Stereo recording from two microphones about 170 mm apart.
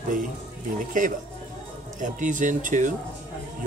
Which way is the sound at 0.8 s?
50° right (ahead or behind).